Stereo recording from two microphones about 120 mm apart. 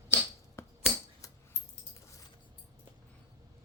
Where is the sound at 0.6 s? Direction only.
25° left (ahead or behind).